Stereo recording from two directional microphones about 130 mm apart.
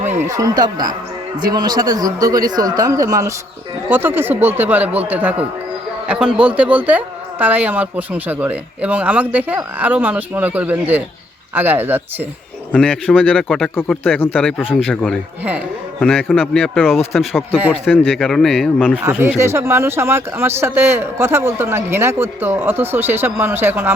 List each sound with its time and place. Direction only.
0.2 s speech: 25° right (ahead or behind)
3.8 s a woman's voice: 15° right (ahead or behind)
12.7 s a man's voice: 10° left (ahead or behind)
16.0 s a man's voice: 10° left (ahead or behind)
17.7 s a man's voice: 15° left (ahead or behind)
19.4 s a woman's voice: 20° right (ahead or behind)